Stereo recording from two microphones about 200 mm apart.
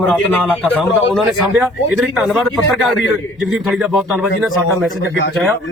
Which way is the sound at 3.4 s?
Centre (ahead or behind).